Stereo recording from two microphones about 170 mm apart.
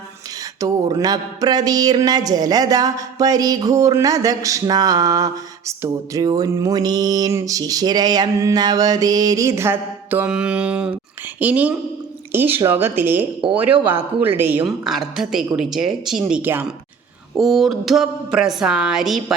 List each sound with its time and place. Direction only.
0.6 s a sound: 20° right (ahead or behind)
11.3 s speech: 10° right (ahead or behind)
14.7 s speech: centre (ahead or behind)